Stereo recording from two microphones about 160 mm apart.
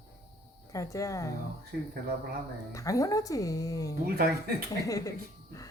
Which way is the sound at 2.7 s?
20° left (ahead or behind).